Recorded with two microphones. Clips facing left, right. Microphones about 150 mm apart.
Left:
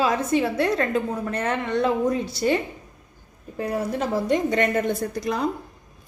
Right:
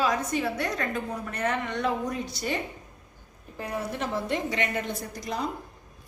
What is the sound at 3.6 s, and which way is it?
A woman's voice, 35° left (ahead or behind).